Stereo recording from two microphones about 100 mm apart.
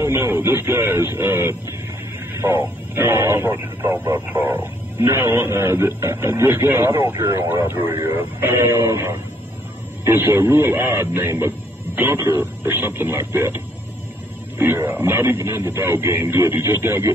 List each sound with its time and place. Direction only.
0.0 s speech: 25° right (ahead or behind)
14.6 s speech: 25° right (ahead or behind)